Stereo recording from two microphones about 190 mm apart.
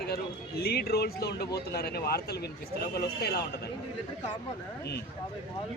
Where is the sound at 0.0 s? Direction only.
55° left (ahead or behind).